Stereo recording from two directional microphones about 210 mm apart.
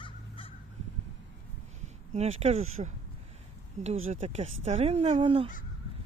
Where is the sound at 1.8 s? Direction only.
30° right (ahead or behind).